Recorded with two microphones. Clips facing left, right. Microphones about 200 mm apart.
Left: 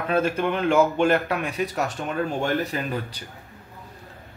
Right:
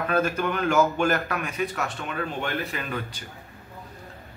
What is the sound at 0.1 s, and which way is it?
Speech, 25° left (ahead or behind).